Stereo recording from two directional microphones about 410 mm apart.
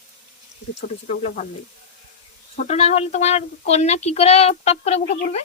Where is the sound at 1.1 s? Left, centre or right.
Centre.